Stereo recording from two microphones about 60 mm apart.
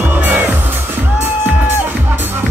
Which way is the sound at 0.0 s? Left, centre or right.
Right.